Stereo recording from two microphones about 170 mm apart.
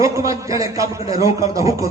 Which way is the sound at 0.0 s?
20° right (ahead or behind).